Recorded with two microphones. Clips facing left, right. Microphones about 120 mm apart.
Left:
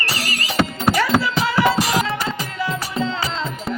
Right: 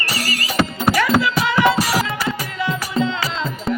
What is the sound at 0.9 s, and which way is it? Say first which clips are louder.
Music: right 2 dB; 30° left (ahead or behind).